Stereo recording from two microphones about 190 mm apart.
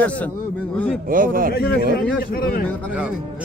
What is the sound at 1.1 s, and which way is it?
Speech, 45° right (ahead or behind).